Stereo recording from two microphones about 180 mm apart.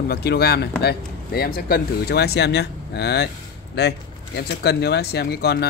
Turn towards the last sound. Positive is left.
turn(degrees=60)  # may be behind; listen again after turning